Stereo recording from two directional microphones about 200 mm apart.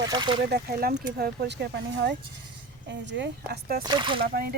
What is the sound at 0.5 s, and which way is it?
Speech, 50° right (ahead or behind).